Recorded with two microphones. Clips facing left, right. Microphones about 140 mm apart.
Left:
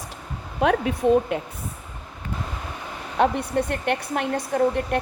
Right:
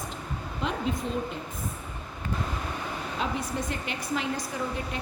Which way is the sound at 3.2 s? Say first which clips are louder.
Left 11 dB; 65° left (ahead or behind).